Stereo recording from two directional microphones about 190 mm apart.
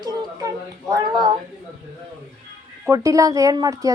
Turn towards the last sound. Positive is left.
turn(degrees=-20)  # may be behind; listen again after turning